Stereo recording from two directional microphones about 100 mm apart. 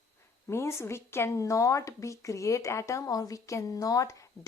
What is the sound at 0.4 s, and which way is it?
Speech, 30° left (ahead or behind).